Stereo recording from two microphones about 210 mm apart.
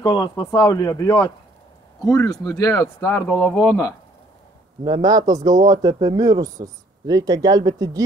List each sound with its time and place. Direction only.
0.0 s speech: 20° left (ahead or behind)
4.8 s speech: 20° right (ahead or behind)